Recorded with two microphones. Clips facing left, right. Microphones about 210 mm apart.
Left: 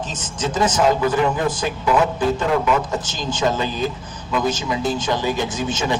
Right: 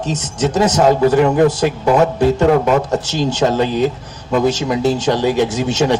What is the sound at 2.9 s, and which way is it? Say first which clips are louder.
A man's voice: right 8 dB; 70° right (ahead or behind).